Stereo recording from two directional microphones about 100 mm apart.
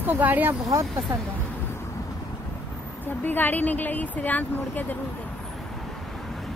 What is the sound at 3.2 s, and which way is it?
Speech, 20° left (ahead or behind).